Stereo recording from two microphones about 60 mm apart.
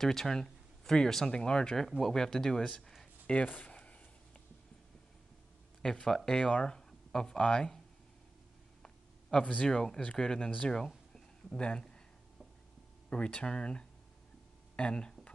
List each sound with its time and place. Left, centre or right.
0.0 s speech: centre
1.9 s speech: centre
3.4 s a sound: left
5.8 s speech: centre
8.8 s a sound: centre
10.0 s speech: centre
13.1 s speech: centre